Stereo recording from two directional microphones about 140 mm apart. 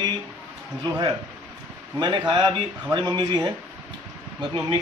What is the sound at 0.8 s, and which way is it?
Speech, 30° right (ahead or behind).